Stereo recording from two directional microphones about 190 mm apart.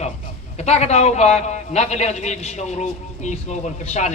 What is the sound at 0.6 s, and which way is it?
A man's voice, 35° left (ahead or behind).